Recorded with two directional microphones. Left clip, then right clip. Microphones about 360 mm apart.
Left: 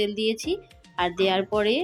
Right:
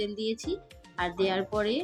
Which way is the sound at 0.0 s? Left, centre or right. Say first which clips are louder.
Left 7 dB; centre.